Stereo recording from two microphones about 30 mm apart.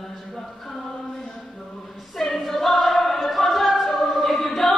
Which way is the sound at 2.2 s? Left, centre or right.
Centre.